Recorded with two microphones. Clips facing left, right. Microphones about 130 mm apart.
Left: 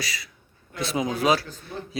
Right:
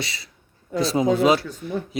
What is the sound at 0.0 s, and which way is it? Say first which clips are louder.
A man's voice: right 2 dB; 25° right (ahead or behind).